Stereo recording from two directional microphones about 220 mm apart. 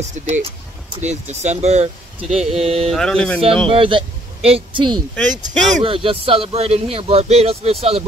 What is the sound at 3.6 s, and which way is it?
Speech, 25° right (ahead or behind).